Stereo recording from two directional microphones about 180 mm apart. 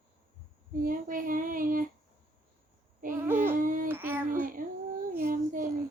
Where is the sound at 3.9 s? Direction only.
10° right (ahead or behind).